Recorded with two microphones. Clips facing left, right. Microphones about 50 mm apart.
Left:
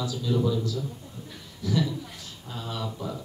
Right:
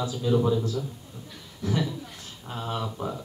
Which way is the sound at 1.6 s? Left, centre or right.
Right.